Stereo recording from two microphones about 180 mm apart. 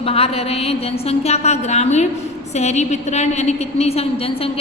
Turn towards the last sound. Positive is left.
turn(degrees=35)  # may be behind; listen again after turning